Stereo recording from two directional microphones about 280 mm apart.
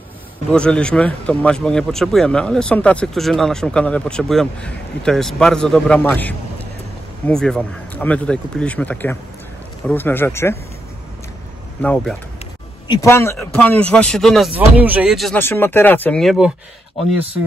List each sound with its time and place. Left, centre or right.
0.5 s speech: centre
11.8 s speech: centre